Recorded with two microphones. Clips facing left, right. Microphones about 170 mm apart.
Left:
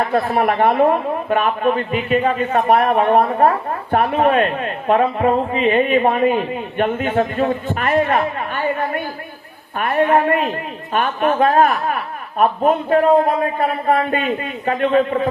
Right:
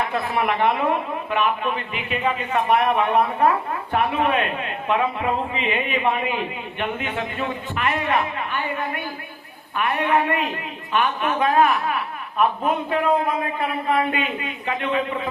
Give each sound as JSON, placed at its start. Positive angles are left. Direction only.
{"t": 0.0, "sound": "a man's voice", "side_deg": 45}